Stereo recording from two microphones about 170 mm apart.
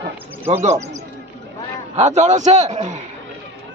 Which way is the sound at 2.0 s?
40° right (ahead or behind).